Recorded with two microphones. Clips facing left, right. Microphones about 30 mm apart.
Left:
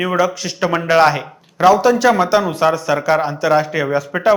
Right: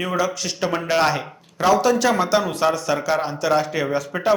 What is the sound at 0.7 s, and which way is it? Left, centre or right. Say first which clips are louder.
Speech: left 7 dB; left.